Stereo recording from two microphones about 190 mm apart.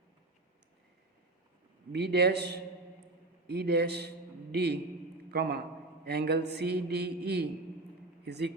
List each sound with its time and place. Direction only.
1.9 s a man's voice: 60° right (ahead or behind)